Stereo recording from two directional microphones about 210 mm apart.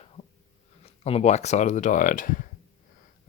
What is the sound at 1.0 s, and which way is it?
Speech, 30° left (ahead or behind).